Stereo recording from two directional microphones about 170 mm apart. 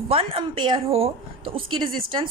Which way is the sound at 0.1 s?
35° right (ahead or behind).